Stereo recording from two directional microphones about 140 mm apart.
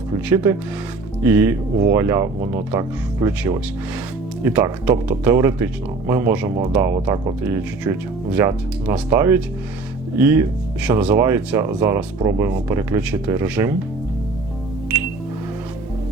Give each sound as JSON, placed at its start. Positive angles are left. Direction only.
{"t": 0.3, "sound": "speech", "side_deg": -20}